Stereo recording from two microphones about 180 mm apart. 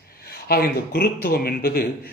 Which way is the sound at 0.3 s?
60° left (ahead or behind).